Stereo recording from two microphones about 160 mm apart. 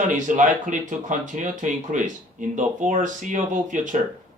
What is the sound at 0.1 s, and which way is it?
Speech, 55° right (ahead or behind).